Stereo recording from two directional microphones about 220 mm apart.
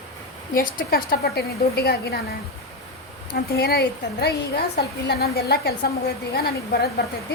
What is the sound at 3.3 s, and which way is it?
A woman's voice, 45° left (ahead or behind).